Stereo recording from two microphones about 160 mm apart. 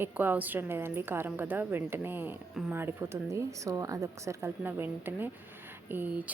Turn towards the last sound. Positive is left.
turn(degrees=-10)  # may be behind; listen again after turning